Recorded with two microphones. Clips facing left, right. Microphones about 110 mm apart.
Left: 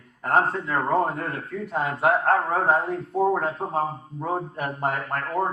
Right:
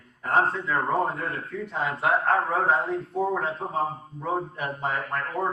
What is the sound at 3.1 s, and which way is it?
Speech, 30° left (ahead or behind).